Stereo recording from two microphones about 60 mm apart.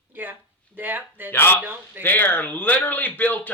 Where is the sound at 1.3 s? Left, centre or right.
Left.